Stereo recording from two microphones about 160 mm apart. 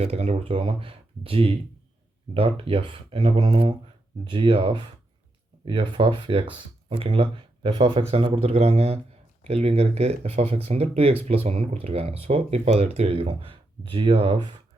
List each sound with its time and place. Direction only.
0.0 s speech: 45° right (ahead or behind)